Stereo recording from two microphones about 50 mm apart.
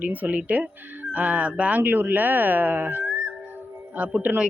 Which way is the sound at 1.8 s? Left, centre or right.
Right.